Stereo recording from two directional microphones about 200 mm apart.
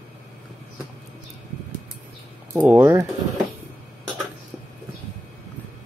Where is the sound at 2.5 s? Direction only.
10° right (ahead or behind).